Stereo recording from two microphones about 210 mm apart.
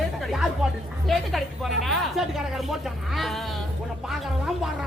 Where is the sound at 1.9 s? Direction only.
Centre (ahead or behind).